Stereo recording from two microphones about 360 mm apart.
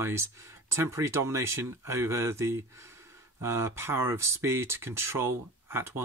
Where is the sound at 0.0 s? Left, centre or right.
Centre.